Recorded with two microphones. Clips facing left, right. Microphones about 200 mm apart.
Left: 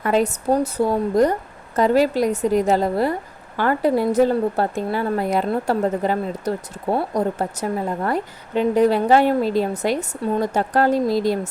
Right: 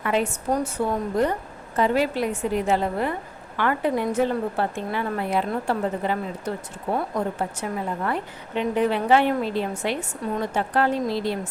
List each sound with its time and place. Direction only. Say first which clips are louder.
0.0 s a woman's voice: left 5 dB; 40° left (ahead or behind)